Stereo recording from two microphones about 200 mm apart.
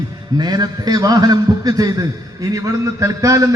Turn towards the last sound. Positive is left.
turn(degrees=-15)  # may be behind; listen again after turning